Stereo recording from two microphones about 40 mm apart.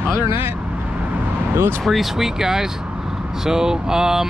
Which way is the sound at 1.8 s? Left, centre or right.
Centre.